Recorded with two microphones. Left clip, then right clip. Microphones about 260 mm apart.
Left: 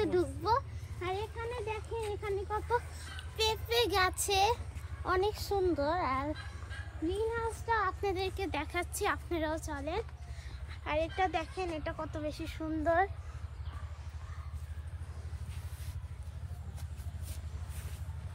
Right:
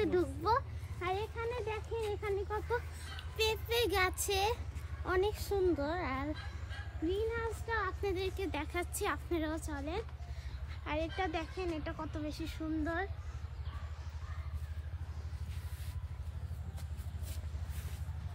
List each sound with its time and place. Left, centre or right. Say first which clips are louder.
0.0 s a sound: left 1 dB; centre
3.3 s child singing: left 2 dB; left
5.0 s a woman's voice: left 2 dB; left